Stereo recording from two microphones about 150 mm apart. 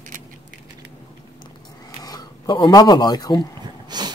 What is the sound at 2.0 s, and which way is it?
Speech, 25° left (ahead or behind).